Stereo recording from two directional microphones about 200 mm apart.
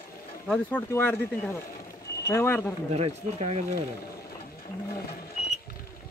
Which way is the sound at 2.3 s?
10° left (ahead or behind).